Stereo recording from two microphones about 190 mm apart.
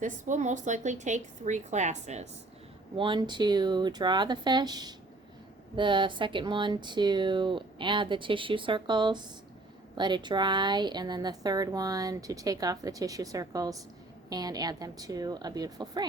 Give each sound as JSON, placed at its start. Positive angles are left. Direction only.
{"t": 0.0, "sound": "a woman's voice", "side_deg": -40}
{"t": 2.9, "sound": "speech", "side_deg": -25}